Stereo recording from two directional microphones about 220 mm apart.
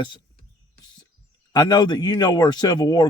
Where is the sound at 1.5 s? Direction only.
20° left (ahead or behind).